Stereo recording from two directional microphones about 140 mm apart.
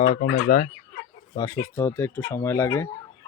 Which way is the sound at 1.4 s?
20° left (ahead or behind).